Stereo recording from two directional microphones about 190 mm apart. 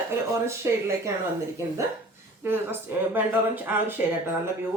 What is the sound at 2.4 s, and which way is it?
Speech, 10° right (ahead or behind).